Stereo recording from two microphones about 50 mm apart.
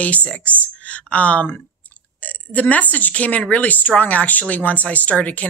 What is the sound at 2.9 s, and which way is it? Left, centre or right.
Speech, left.